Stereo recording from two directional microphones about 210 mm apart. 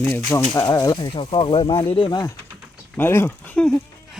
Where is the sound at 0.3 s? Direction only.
15° left (ahead or behind).